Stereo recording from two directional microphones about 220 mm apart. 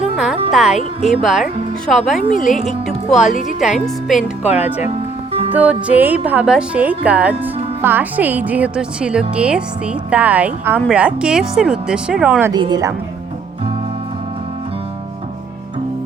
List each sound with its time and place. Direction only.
0.5 s speech: centre (ahead or behind)
4.4 s speech: 30° left (ahead or behind)
5.5 s speech: 5° right (ahead or behind)
12.5 s a woman's voice: 20° right (ahead or behind)